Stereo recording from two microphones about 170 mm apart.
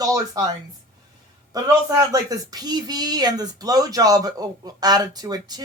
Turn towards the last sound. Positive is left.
turn(degrees=-25)  # may be behind; listen again after turning